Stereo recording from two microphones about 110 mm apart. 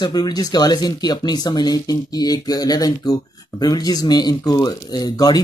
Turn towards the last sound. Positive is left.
turn(degrees=35)  # may be behind; listen again after turning